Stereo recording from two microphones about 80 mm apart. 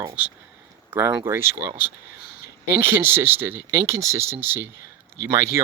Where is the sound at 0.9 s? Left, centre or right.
Right.